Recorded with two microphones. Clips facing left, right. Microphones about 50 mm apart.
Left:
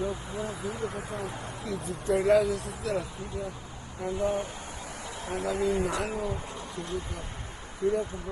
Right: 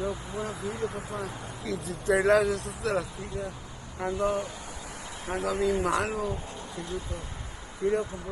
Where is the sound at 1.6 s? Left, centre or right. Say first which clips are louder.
Right 2 dB; right.